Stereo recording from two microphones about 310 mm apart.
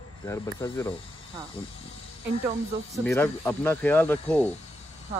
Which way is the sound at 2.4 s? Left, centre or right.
Centre.